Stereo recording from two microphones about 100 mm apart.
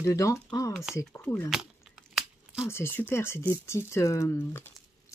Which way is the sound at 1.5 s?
5° right (ahead or behind).